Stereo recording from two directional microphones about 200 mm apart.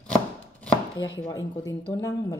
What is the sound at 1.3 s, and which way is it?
Speech, 20° left (ahead or behind).